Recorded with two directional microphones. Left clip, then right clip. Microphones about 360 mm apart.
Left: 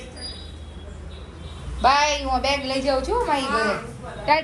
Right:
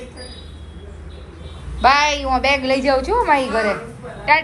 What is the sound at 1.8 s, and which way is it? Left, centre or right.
A woman's voice, centre.